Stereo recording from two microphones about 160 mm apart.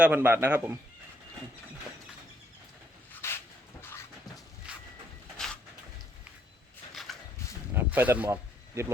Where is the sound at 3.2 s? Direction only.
15° left (ahead or behind).